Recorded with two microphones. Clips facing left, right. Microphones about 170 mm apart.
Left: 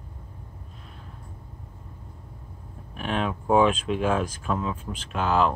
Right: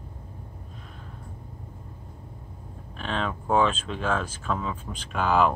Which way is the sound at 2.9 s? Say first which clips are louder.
Left 2 dB; 10° left (ahead or behind).